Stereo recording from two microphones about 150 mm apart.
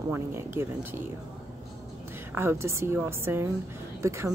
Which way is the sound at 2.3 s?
15° right (ahead or behind).